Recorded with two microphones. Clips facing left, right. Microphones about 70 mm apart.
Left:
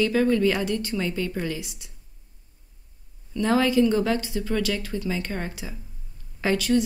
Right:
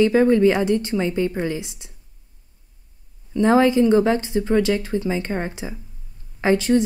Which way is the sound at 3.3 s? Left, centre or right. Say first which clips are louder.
Right 5 dB; right.